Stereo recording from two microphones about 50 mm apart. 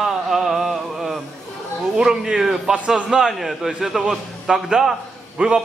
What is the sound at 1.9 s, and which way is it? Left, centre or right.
A man's voice, centre.